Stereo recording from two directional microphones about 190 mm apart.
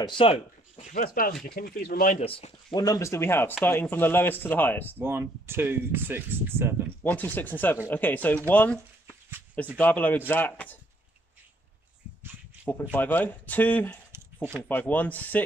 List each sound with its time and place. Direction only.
0.0 s speech: 25° left (ahead or behind)
0.9 s speech: 50° left (ahead or behind)
2.2 s speech: 30° left (ahead or behind); by 4.9 s 10° left (ahead or behind)
4.9 s speech: 10° right (ahead or behind)
7.0 s speech: 10° left (ahead or behind)
9.8 s speech: 10° left (ahead or behind)
12.9 s speech: 10° left (ahead or behind)
14.1 s a sound: 10° right (ahead or behind)
14.6 s speech: 10° left (ahead or behind)